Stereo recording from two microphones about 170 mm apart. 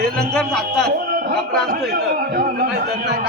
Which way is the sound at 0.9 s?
65° right (ahead or behind).